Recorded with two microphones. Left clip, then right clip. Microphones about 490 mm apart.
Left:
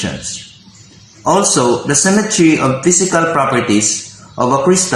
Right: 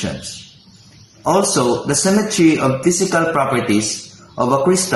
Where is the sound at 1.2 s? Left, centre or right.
Right.